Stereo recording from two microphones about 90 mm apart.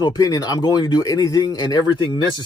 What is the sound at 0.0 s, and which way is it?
A man's voice, 40° left (ahead or behind).